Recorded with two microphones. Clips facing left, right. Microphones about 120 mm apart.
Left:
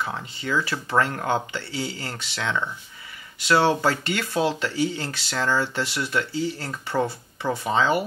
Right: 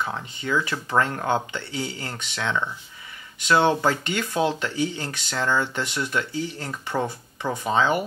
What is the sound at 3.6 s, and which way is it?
Speech, 20° right (ahead or behind).